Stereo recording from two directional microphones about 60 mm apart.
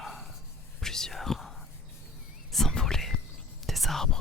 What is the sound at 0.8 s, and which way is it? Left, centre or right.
Whispering, centre.